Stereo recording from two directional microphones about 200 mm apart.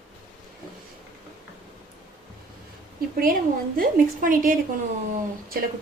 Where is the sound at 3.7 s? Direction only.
45° right (ahead or behind).